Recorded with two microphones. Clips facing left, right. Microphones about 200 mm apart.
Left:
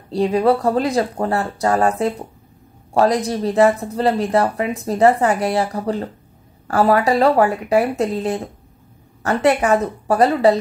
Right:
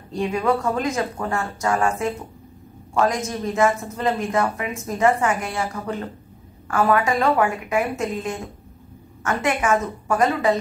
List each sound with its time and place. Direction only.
0.1 s a woman's voice: 35° left (ahead or behind)